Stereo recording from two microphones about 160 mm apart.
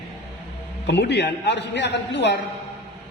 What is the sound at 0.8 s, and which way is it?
A man's voice, 90° left.